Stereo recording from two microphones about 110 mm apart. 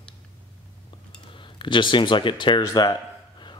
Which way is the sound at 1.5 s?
45° left (ahead or behind).